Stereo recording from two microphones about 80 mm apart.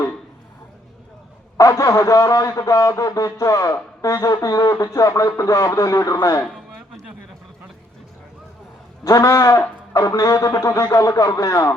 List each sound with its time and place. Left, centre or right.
1.5 s a man's voice: left
6.4 s a sound: centre
9.0 s a man's voice: left